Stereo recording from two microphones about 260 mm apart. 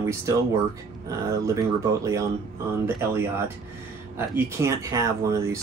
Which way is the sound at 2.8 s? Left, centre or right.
Centre.